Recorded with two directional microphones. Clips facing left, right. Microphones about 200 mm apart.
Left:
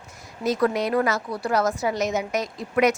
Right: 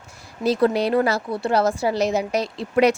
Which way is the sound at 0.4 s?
30° right (ahead or behind).